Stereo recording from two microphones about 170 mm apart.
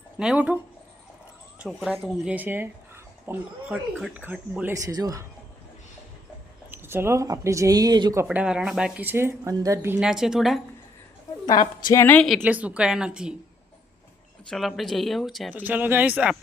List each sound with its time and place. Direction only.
0.2 s speech: 5° right (ahead or behind)
2.3 s speech: 10° right (ahead or behind)
6.7 s speech: 15° right (ahead or behind)
8.2 s speech: 10° right (ahead or behind)
10.1 s speech: 5° right (ahead or behind)
11.4 s a woman's voice: 25° left (ahead or behind)
12.0 s speech: 5° left (ahead or behind)
12.4 s speech: 10° right (ahead or behind)
14.5 s speech: centre (ahead or behind)
15.5 s speech: 10° right (ahead or behind)